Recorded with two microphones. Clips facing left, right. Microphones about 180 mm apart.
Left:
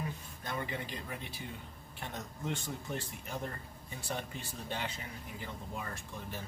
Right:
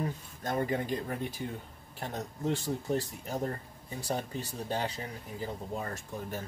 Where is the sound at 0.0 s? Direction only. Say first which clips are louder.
Right 6 dB; 45° right (ahead or behind).